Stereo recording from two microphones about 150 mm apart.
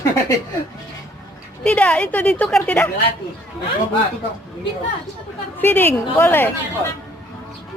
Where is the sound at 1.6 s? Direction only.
5° left (ahead or behind).